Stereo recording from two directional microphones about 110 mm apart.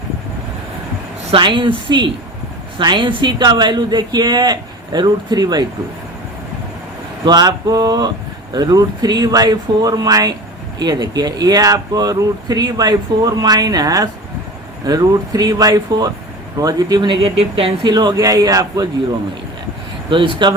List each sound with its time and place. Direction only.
1.3 s speech: 50° right (ahead or behind)
7.3 s speech: 40° right (ahead or behind); by 17.7 s 55° right (ahead or behind)
17.8 s speech: 40° right (ahead or behind)
20.1 s speech: 45° right (ahead or behind)